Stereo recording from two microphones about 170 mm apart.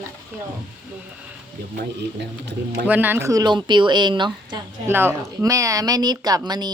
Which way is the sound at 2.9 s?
10° right (ahead or behind).